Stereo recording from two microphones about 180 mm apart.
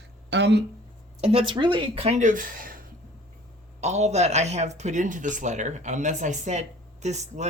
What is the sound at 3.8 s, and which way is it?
Speech, 40° right (ahead or behind).